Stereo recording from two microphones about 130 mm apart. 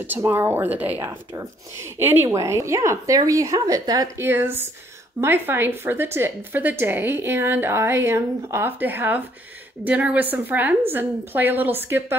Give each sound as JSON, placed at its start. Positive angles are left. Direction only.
{"t": 0.0, "sound": "a woman's voice", "side_deg": -15}
{"t": 4.3, "sound": "a woman's voice", "side_deg": -20}